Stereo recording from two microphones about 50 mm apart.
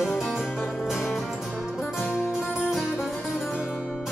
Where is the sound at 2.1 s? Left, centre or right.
Centre.